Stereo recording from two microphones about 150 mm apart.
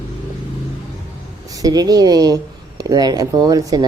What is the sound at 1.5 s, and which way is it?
Speech, 25° right (ahead or behind).